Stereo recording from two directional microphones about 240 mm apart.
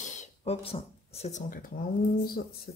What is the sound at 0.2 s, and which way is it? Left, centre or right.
Speech, left.